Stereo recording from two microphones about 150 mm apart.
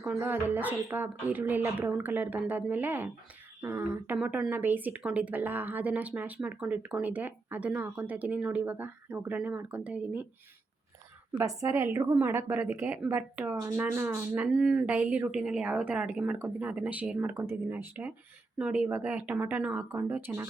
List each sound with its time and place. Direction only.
0.0 s a woman's voice: 10° right (ahead or behind)
11.3 s a woman's voice: 20° right (ahead or behind)